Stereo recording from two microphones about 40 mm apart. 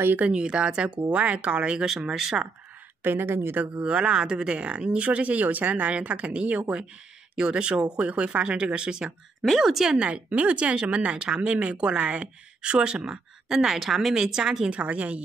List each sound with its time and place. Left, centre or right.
0.3 s speech: right
2.0 s a woman's voice: centre
3.0 s speech: right
3.6 s speech: right
7.3 s speech: right
9.6 s a woman's voice: centre
9.9 s a woman's voice: right
14.7 s speech: right